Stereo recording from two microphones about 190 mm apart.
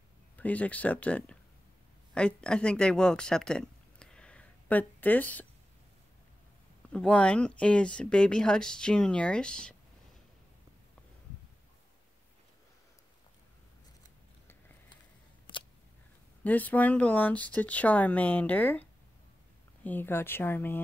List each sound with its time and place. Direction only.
0.4 s speech: 10° left (ahead or behind)
6.9 s speech: 5° left (ahead or behind)
15.5 s a sound: 25° left (ahead or behind)
16.4 s speech: 10° left (ahead or behind)